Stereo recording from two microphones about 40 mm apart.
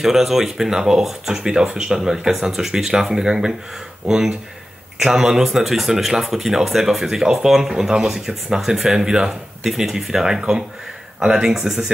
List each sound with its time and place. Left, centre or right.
0.0 s speech: centre